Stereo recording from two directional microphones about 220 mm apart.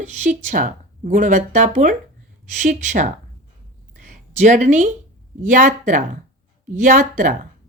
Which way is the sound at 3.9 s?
35° right (ahead or behind).